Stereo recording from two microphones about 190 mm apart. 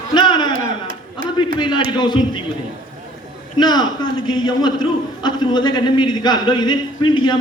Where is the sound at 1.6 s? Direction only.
25° left (ahead or behind).